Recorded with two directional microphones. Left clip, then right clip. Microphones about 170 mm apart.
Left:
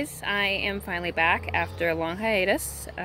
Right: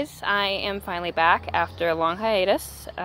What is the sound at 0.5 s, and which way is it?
Speech, 50° right (ahead or behind).